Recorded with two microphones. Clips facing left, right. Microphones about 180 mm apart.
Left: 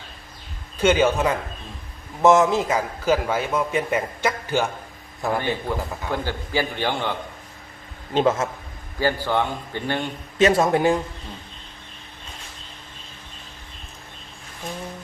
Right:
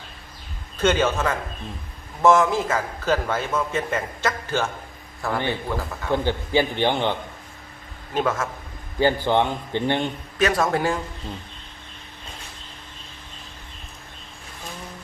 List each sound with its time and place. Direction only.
0.8 s a man's voice: 10° left (ahead or behind)
6.2 s a man's voice: 20° right (ahead or behind)
8.1 s a man's voice: 25° left (ahead or behind)
9.0 s a man's voice: 20° right (ahead or behind)
10.3 s a man's voice: 25° left (ahead or behind)